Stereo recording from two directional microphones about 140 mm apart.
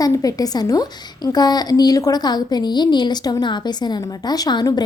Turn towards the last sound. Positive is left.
turn(degrees=30)  # may be behind; listen again after turning